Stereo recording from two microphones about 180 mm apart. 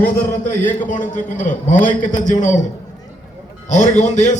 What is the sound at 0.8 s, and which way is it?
A man's voice, 45° left (ahead or behind).